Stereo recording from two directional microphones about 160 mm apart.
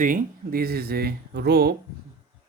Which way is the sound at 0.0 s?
60° right (ahead or behind).